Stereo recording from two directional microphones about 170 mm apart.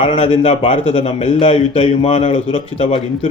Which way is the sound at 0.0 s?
35° left (ahead or behind).